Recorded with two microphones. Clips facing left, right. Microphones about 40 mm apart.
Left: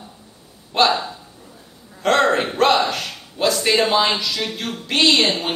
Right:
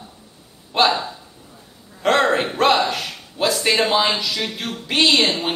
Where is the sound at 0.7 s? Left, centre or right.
Centre.